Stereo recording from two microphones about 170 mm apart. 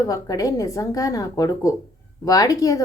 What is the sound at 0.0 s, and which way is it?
Speech, 20° left (ahead or behind).